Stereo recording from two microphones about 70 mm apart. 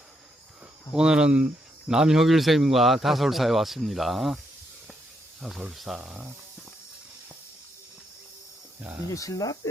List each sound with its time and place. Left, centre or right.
0.9 s a man's voice: centre
5.4 s a man's voice: centre
9.1 s speech: left